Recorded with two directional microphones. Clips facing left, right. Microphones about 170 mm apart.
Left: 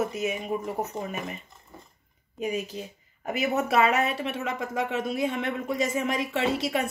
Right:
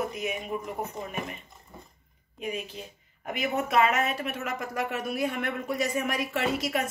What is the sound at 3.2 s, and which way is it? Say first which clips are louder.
Speech: left 3 dB; 35° left (ahead or behind).